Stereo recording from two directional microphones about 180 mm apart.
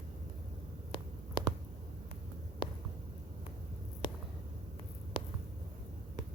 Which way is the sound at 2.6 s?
25° left (ahead or behind).